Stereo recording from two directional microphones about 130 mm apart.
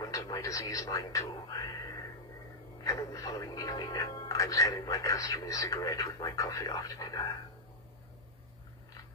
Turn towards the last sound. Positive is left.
turn(degrees=30)  # may be behind; listen again after turning